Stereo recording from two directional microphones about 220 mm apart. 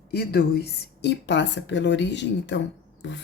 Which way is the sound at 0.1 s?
45° left (ahead or behind).